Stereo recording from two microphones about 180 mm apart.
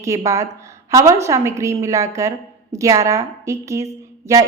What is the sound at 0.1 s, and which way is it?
A woman's voice, 15° right (ahead or behind).